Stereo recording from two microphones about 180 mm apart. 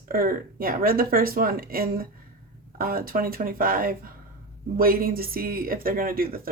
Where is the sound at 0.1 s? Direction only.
50° right (ahead or behind).